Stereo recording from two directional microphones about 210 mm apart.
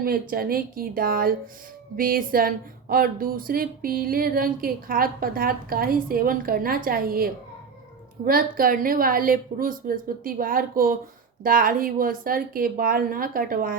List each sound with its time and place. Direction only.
0.0 s speech: 45° right (ahead or behind)